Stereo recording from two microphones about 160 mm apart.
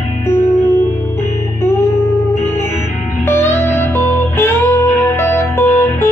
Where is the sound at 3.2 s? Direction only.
15° left (ahead or behind).